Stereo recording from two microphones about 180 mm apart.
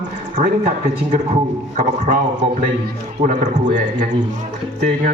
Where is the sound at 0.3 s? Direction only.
40° right (ahead or behind).